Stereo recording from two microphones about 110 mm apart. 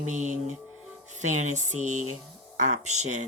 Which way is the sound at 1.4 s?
90° right.